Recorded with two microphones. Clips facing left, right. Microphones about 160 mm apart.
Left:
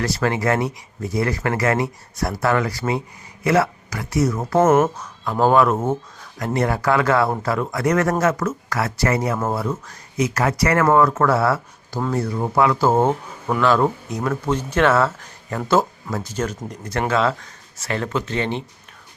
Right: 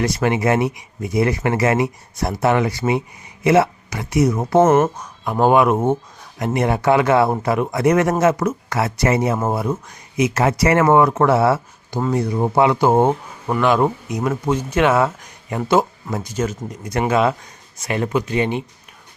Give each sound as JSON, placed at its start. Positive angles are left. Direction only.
{"t": 0.0, "sound": "speech", "side_deg": -20}
{"t": 4.6, "sound": "speech", "side_deg": 0}
{"t": 4.9, "sound": "speech", "side_deg": -15}
{"t": 11.9, "sound": "speech", "side_deg": -10}